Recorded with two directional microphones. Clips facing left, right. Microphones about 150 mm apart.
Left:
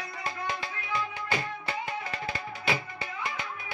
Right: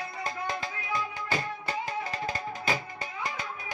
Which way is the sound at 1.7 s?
40° right (ahead or behind).